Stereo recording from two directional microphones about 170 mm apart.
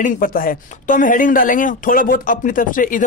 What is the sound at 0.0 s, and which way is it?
Speech, 55° left (ahead or behind).